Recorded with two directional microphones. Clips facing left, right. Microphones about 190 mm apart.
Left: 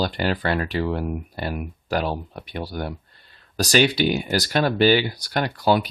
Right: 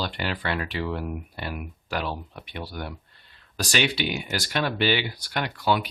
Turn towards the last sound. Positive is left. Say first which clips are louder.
# left 5 dB
turn(degrees=40)  # may be behind; listen again after turning